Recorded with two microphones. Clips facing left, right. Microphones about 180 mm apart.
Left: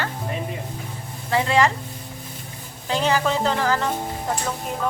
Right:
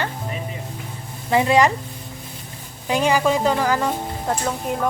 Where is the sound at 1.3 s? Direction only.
15° right (ahead or behind).